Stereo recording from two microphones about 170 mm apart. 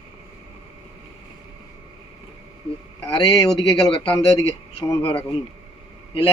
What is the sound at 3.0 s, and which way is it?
A man's voice, 25° left (ahead or behind).